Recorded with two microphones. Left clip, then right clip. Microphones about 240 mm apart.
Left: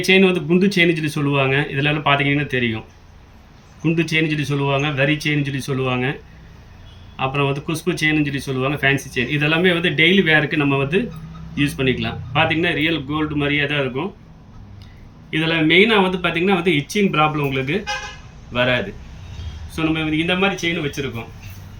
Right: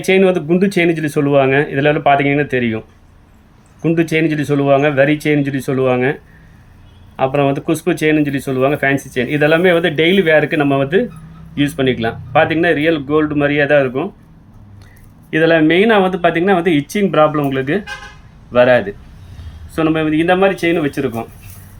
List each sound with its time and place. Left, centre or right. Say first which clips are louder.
0.0 s speech: right 3 dB; centre
3.8 s speech: right 4 dB; centre
7.2 s speech: right 6 dB; centre
15.3 s a man's voice: right 6 dB; centre